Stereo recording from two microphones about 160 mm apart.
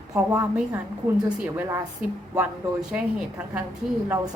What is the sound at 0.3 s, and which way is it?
A woman's voice, 10° right (ahead or behind).